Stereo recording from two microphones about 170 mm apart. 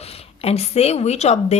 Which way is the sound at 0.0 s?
35° left (ahead or behind).